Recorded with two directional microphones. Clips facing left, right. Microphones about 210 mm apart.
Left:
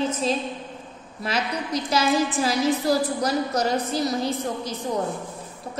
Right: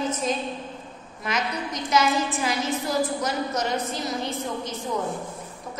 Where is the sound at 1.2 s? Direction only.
35° left (ahead or behind).